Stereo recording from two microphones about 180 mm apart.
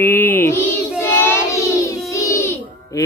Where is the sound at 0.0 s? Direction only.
10° left (ahead or behind).